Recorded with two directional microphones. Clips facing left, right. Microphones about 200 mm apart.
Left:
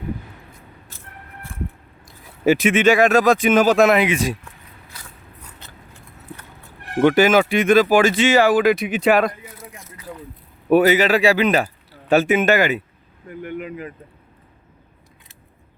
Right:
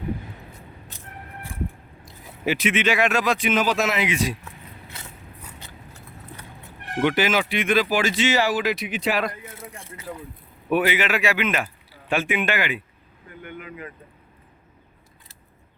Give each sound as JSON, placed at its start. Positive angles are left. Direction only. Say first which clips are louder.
{"t": 2.0, "sound": "speech", "louder": "left 9 dB", "side_deg": 45}
{"t": 4.9, "sound": "biting", "louder": "even", "side_deg": -25}
{"t": 7.0, "sound": "speech", "louder": "left 7 dB", "side_deg": 45}
{"t": 9.6, "sound": "a sound", "louder": "even", "side_deg": -30}
{"t": 10.7, "sound": "speech", "louder": "left 8 dB", "side_deg": 40}